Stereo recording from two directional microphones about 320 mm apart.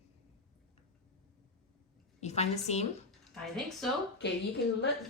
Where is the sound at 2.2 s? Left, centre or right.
Centre.